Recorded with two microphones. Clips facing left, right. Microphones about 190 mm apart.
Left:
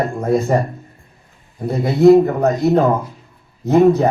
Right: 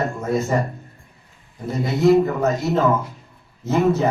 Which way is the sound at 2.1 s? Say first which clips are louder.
Left 4 dB; 35° left (ahead or behind).